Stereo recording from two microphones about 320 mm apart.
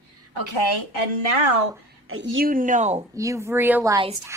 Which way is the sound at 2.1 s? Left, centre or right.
Right.